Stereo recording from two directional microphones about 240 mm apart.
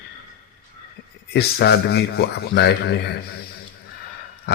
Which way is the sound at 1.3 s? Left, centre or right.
Left.